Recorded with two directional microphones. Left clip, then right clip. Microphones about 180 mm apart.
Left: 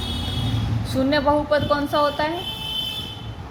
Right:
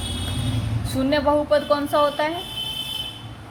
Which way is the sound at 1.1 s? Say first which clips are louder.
Right 1 dB; 20° right (ahead or behind).